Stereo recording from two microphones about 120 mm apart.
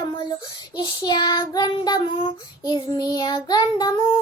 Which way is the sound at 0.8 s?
40° left (ahead or behind).